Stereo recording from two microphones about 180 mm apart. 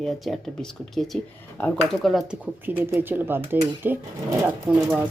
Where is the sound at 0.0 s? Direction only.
Centre (ahead or behind).